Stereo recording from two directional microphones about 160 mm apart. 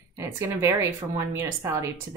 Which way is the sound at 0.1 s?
20° right (ahead or behind).